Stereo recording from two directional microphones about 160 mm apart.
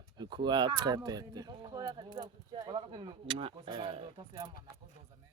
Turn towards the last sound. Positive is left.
turn(degrees=-35)  # may be behind; listen again after turning